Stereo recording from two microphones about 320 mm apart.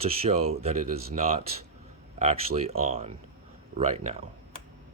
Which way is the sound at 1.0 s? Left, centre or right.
Right.